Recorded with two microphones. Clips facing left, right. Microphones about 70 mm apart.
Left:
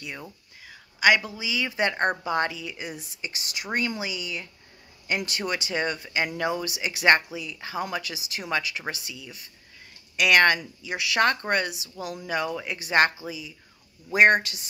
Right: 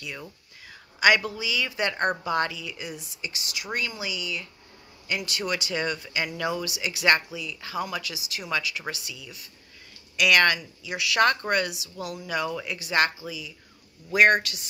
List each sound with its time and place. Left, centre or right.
0.9 s speech: centre; by 14.7 s left